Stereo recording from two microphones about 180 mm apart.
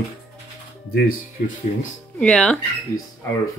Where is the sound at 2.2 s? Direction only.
5° left (ahead or behind).